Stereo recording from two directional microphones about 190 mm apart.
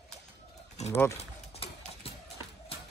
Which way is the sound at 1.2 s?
30° left (ahead or behind).